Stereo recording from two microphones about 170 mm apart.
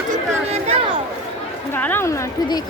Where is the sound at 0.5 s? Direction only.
35° right (ahead or behind).